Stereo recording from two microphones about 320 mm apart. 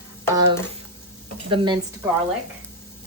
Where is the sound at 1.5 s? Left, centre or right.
Centre.